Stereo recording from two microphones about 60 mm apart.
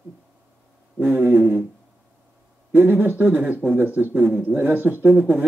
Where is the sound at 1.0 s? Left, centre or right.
Right.